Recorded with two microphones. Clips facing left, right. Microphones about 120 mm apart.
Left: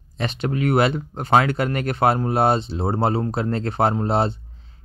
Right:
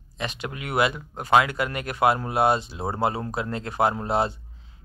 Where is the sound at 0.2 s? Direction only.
35° left (ahead or behind).